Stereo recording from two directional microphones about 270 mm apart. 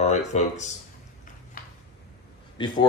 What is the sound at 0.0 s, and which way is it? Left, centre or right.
Speech, left.